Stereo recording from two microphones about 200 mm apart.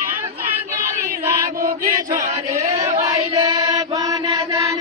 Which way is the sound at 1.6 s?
40° right (ahead or behind).